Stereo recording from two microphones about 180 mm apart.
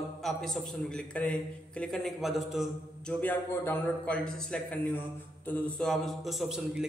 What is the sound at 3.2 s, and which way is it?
A man's voice, 10° left (ahead or behind).